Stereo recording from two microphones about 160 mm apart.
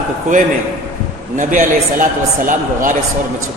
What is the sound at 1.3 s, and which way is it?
A man's voice, 55° right (ahead or behind).